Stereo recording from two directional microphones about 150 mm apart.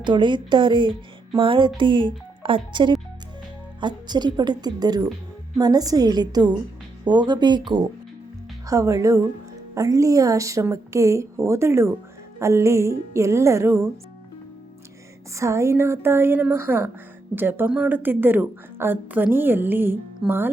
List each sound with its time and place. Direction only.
0.0 s a woman's voice: 30° right (ahead or behind)
15.4 s a woman's voice: 20° right (ahead or behind)